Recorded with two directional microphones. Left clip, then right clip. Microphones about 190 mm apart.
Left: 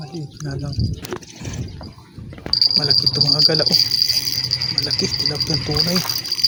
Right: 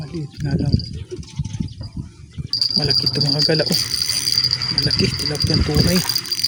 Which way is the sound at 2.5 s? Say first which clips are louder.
Left 4 dB; 55° right (ahead or behind).